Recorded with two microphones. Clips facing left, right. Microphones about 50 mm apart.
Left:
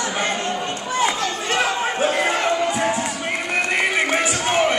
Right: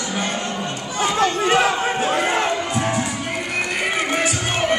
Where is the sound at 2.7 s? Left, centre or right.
Centre.